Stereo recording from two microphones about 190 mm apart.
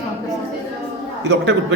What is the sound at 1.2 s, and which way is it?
Speech, 75° right (ahead or behind).